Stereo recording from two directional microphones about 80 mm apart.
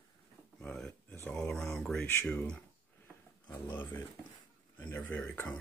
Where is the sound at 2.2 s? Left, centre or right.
Centre.